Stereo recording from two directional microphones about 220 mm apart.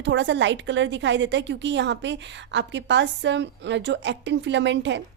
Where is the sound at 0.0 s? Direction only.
55° right (ahead or behind).